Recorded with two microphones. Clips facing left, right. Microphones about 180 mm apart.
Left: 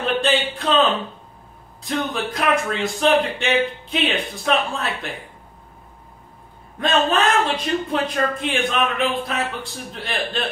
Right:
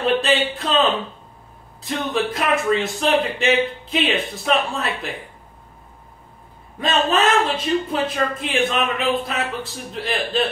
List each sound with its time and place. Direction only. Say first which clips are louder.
0.2 s a sound: even; centre (ahead or behind)
1.8 s a man's voice: right 2 dB; centre (ahead or behind)
6.8 s a man's voice: even; centre (ahead or behind)